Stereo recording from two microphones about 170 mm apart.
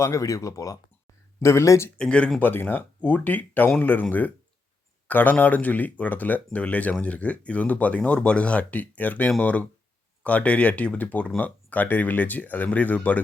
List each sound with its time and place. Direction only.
0.0 s speech: 20° left (ahead or behind)
2.0 s speech: 5° left (ahead or behind)